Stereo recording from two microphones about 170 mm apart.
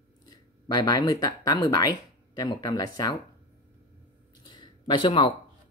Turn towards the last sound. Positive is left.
turn(degrees=25)  # may be behind; listen again after turning